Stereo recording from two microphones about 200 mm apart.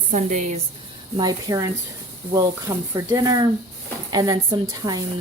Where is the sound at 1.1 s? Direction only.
20° right (ahead or behind).